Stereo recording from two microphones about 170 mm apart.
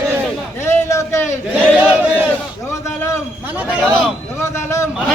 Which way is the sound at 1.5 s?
10° right (ahead or behind).